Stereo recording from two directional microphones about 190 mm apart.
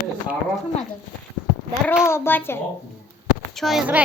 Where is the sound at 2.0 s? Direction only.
10° left (ahead or behind).